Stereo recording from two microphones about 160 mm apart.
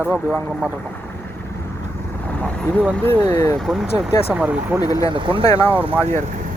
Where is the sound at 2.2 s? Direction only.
10° left (ahead or behind).